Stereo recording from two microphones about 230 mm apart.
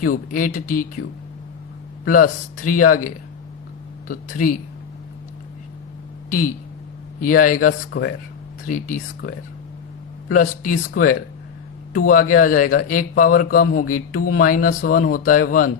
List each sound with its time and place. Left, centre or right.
0.0 s speech: left
2.0 s speech: left
4.1 s speech: left
7.2 s speech: left